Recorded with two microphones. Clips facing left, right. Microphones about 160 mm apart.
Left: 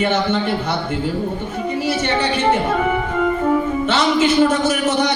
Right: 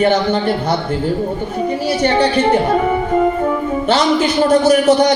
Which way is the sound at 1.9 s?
35° right (ahead or behind).